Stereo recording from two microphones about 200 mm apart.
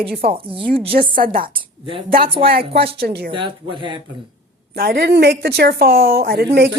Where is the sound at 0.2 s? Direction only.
30° right (ahead or behind).